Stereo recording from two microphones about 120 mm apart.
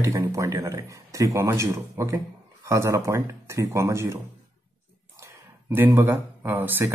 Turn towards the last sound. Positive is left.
turn(degrees=-15)  # may be behind; listen again after turning